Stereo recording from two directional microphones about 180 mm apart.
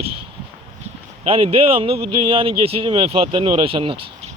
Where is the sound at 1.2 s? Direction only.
30° right (ahead or behind).